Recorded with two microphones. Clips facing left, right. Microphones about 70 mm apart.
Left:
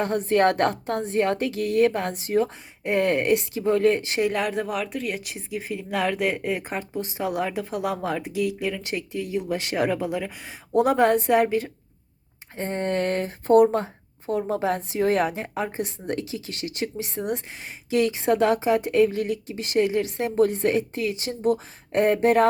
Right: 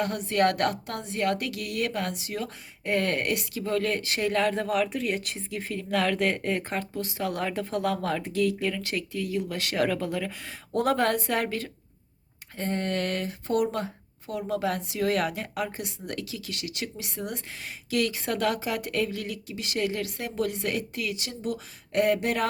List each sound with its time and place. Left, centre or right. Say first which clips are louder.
0.0 s speech: left 4 dB; left
2.8 s speech: left 5 dB; centre
4.3 s a woman's voice: even; centre; by 22.4 s left